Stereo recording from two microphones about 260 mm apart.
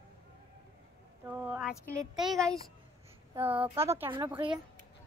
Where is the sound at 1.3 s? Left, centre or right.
Centre.